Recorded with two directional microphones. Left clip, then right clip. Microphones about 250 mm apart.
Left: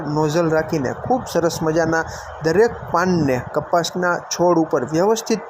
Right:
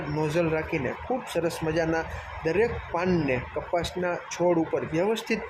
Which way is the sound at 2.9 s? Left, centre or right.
Centre.